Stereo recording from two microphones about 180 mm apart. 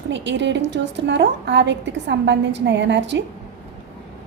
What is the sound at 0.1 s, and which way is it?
A woman's voice, 80° right.